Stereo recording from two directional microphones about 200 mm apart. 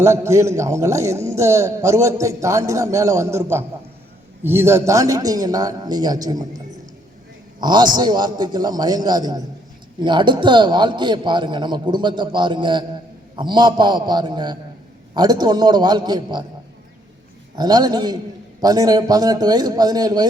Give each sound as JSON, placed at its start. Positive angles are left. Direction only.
{"t": 0.0, "sound": "a man's voice", "side_deg": -15}
{"t": 4.4, "sound": "a man's voice", "side_deg": -10}
{"t": 7.6, "sound": "a man's voice", "side_deg": -20}
{"t": 17.6, "sound": "a man's voice", "side_deg": -20}